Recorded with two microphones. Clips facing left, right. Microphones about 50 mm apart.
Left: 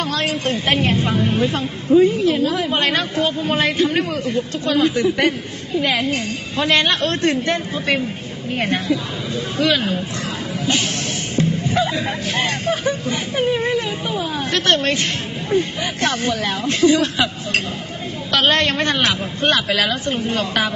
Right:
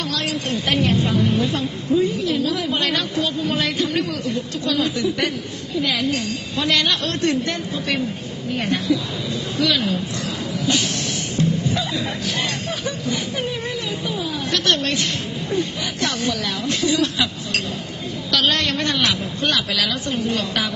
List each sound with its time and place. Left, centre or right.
0.1 s a woman's voice: left
11.3 s a woman's voice: left